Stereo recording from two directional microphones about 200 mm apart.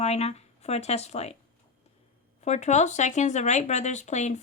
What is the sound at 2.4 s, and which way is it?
Speech, 35° left (ahead or behind).